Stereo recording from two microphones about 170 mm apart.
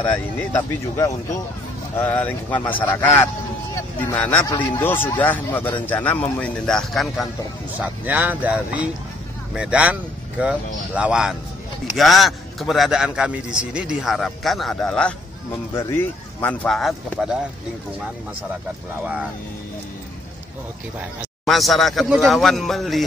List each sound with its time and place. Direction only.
2.0 s speech: 10° left (ahead or behind)
7.8 s a man's voice: 10° right (ahead or behind)
21.5 s a man's voice: centre (ahead or behind)